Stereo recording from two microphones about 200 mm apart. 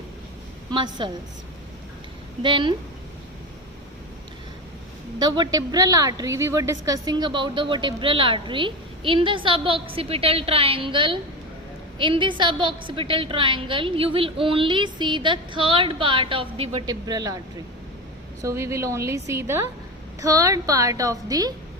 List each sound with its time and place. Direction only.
0.7 s a woman's voice: 25° right (ahead or behind)
2.4 s a woman's voice: 25° right (ahead or behind)
5.2 s a woman's voice: 20° right (ahead or behind)
18.4 s a woman's voice: 15° right (ahead or behind)